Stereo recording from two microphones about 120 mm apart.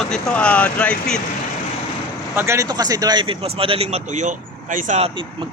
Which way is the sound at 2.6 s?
35° right (ahead or behind).